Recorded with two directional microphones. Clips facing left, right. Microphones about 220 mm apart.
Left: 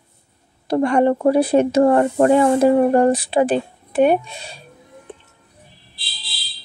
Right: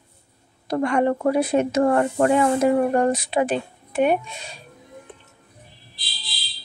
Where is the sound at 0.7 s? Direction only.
35° left (ahead or behind).